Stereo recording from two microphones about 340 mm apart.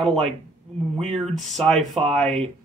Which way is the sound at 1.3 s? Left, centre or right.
Centre.